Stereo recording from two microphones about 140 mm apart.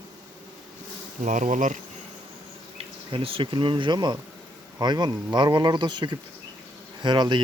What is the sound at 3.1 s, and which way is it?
Speech, 40° right (ahead or behind).